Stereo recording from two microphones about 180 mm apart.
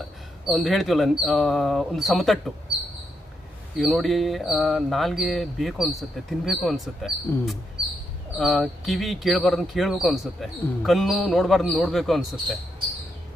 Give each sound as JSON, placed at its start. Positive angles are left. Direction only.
{"t": 0.0, "sound": "speech", "side_deg": 0}
{"t": 3.8, "sound": "speech", "side_deg": 0}